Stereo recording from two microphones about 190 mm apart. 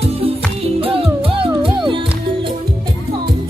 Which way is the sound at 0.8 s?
30° right (ahead or behind).